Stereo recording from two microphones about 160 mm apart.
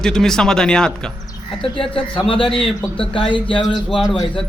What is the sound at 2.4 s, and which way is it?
Speech, centre (ahead or behind).